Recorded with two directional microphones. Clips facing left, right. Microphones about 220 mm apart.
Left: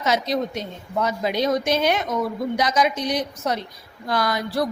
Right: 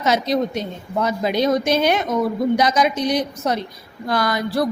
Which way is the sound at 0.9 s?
45° right (ahead or behind).